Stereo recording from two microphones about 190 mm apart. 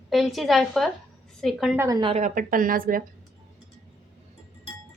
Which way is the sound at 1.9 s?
25° right (ahead or behind).